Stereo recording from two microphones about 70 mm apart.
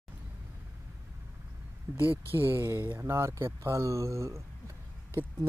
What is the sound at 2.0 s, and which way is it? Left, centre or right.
Speech, right.